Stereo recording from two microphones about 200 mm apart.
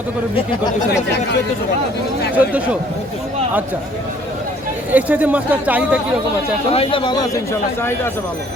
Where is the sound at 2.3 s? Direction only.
5° right (ahead or behind).